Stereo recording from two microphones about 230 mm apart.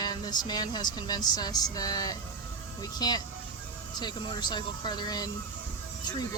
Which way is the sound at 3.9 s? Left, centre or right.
Centre.